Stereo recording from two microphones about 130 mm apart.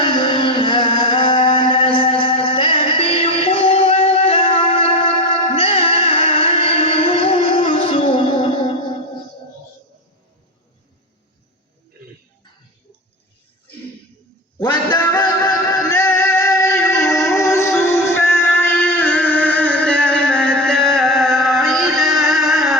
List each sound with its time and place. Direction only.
0.0 s music: 35° left (ahead or behind)
14.6 s music: 35° left (ahead or behind); by 22.8 s centre (ahead or behind)